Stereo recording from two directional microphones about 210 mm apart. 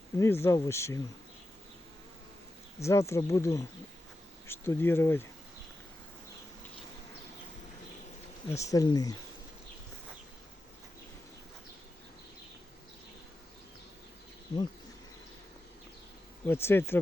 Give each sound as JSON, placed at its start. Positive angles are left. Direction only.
{"t": 0.2, "sound": "speech", "side_deg": 10}
{"t": 2.8, "sound": "speech", "side_deg": 15}
{"t": 8.4, "sound": "speech", "side_deg": 15}
{"t": 16.5, "sound": "speech", "side_deg": 10}